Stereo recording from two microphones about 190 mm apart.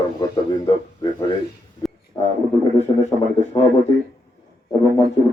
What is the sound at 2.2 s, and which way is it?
Speech, 15° left (ahead or behind).